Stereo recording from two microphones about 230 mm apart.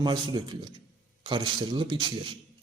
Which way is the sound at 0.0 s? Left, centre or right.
Centre.